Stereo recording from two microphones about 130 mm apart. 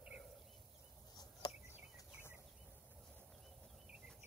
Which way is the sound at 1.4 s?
30° left (ahead or behind).